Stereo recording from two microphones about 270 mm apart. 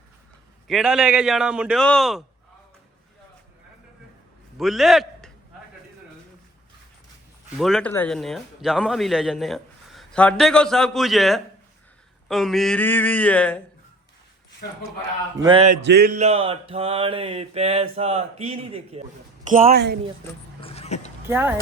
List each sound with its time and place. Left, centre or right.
0.7 s a man's voice: centre
4.5 s a man's voice: centre
7.5 s a man's voice: centre
14.6 s a man's voice: left
15.4 s mantra: centre
15.8 s mantra: right
19.6 s speech: right
20.6 s vehicle: left
21.2 s speech: centre